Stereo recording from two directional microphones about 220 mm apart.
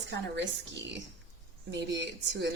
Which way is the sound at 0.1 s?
55° right (ahead or behind).